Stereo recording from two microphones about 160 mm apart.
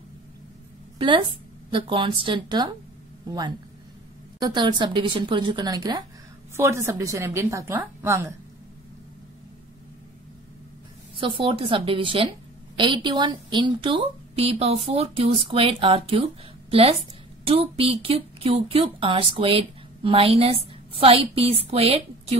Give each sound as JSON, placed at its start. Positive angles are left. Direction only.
{"t": 0.9, "sound": "a woman's voice", "side_deg": -30}
{"t": 11.1, "sound": "a woman's voice", "side_deg": -35}
{"t": 17.5, "sound": "speech", "side_deg": -35}